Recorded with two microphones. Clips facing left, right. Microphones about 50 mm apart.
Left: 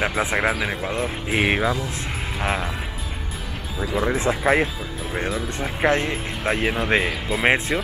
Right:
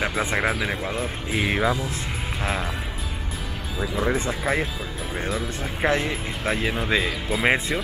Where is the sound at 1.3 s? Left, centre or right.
Left.